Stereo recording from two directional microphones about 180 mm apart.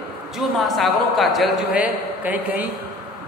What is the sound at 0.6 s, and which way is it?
A woman's voice, centre (ahead or behind).